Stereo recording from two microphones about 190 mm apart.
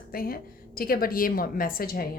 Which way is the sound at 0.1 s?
50° left (ahead or behind).